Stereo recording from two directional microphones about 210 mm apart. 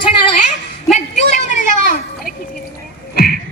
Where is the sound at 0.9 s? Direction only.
30° left (ahead or behind).